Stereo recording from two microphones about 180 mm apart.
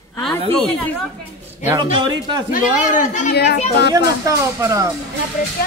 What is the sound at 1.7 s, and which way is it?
Speech, 25° right (ahead or behind).